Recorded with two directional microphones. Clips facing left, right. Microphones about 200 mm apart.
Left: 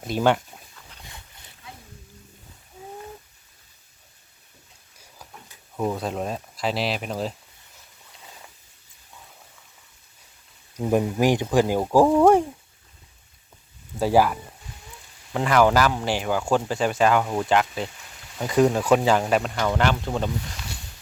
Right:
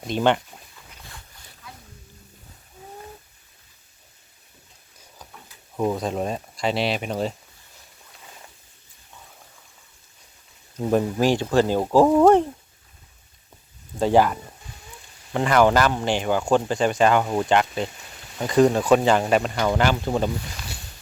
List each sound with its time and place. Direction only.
0.0 s speech: 5° left (ahead or behind)
5.7 s speech: 5° right (ahead or behind)
10.8 s speech: 15° left (ahead or behind)
14.0 s speech: 5° left (ahead or behind)